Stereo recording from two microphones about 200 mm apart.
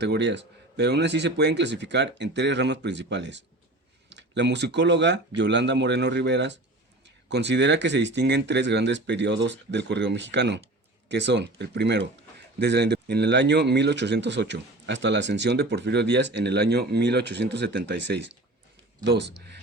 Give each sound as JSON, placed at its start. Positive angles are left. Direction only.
{"t": 0.0, "sound": "speech", "side_deg": -60}